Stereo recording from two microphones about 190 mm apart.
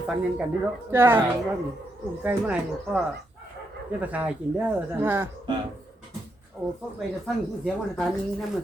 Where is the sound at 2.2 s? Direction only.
5° right (ahead or behind).